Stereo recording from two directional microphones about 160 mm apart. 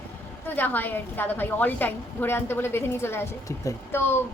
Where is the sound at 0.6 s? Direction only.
10° left (ahead or behind).